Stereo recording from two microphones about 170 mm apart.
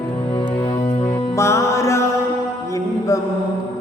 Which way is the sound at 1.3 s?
15° left (ahead or behind).